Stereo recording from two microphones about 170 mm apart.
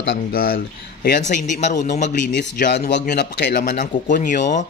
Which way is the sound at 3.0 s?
70° left (ahead or behind).